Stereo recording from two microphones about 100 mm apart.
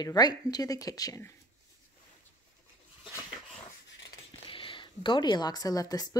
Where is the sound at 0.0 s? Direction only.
45° left (ahead or behind).